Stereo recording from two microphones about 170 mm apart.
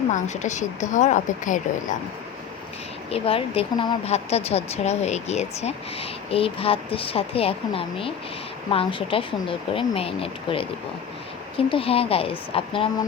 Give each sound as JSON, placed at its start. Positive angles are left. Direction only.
{"t": 0.1, "sound": "a woman's voice", "side_deg": 45}
{"t": 3.1, "sound": "speech", "side_deg": 35}